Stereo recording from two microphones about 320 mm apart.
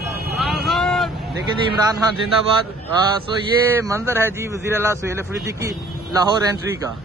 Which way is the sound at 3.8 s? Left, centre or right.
Centre.